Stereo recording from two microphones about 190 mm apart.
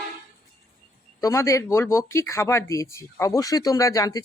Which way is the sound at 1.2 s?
15° left (ahead or behind).